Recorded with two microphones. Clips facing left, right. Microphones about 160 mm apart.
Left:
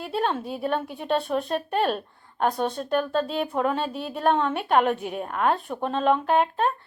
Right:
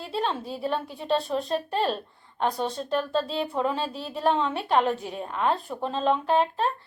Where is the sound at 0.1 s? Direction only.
55° left (ahead or behind).